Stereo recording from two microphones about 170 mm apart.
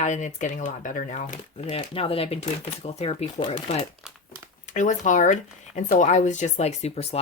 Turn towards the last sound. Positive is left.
turn(degrees=40)  # may be behind; listen again after turning